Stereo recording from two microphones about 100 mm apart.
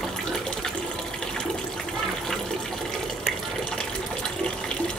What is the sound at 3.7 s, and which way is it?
Water, 5° left (ahead or behind).